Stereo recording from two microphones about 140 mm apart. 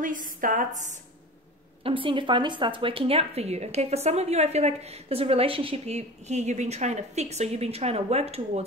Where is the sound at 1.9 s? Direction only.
40° right (ahead or behind).